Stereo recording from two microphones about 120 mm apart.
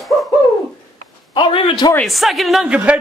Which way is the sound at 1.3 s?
45° left (ahead or behind).